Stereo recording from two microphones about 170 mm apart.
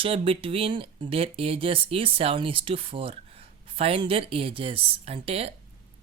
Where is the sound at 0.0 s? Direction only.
35° right (ahead or behind).